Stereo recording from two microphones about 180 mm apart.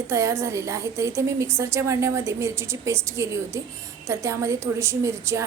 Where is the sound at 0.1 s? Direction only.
15° right (ahead or behind).